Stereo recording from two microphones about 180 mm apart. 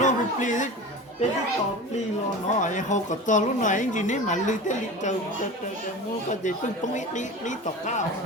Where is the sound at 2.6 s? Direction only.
45° left (ahead or behind).